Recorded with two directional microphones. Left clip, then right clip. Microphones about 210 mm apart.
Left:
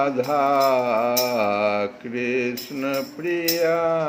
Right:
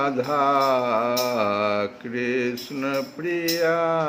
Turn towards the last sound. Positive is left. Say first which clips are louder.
# left 1 dB
turn(degrees=-10)  # may be behind; listen again after turning